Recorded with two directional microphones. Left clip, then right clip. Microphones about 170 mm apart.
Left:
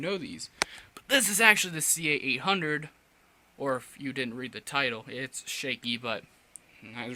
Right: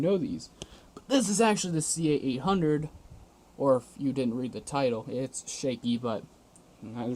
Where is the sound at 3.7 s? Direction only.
60° left (ahead or behind).